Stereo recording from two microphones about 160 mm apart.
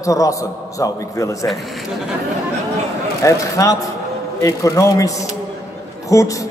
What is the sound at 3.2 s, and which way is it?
A man's voice, 20° left (ahead or behind).